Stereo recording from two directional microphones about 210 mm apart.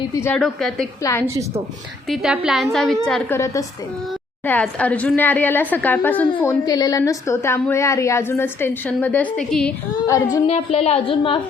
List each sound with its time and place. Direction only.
0.1 s a woman's voice: 15° left (ahead or behind)
0.3 s a woman's voice: centre (ahead or behind)
2.0 s a woman's voice: centre (ahead or behind)
10.3 s a woman's voice: 25° left (ahead or behind)